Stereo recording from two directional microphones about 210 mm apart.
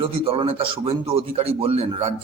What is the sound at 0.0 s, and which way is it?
A man's voice, 25° right (ahead or behind).